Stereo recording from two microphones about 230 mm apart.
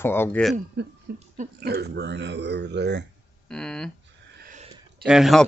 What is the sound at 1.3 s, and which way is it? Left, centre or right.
Speech, right.